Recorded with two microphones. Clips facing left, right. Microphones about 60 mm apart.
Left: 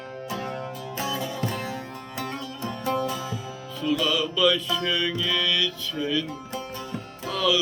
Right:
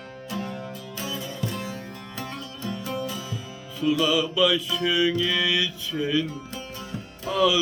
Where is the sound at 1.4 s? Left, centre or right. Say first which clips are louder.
Left 2 dB; left.